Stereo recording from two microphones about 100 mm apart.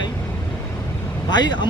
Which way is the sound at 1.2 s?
45° left (ahead or behind).